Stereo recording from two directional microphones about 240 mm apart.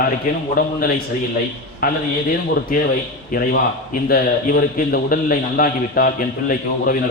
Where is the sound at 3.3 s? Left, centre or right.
Left.